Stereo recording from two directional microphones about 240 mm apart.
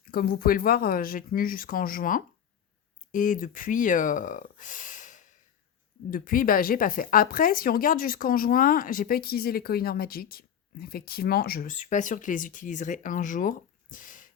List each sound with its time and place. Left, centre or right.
0.0 s speech: left